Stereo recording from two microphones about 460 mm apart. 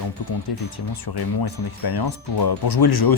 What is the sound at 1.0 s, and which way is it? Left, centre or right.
Speech, left.